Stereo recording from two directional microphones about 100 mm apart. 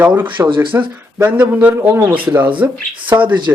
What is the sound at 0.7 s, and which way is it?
Speech, 15° right (ahead or behind).